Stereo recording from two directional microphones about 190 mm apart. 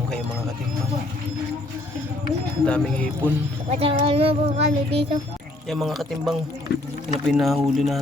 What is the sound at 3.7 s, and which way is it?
Speech, 30° right (ahead or behind).